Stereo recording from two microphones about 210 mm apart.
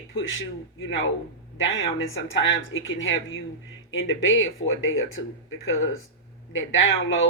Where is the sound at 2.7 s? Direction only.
70° left (ahead or behind).